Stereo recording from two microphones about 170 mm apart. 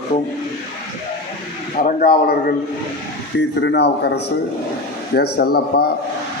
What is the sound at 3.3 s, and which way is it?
Speech, 90° left.